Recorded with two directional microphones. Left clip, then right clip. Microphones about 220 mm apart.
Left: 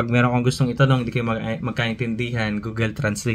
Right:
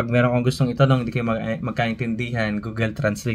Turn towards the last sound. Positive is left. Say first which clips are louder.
# right 1 dB
turn(degrees=5)  # may be behind; listen again after turning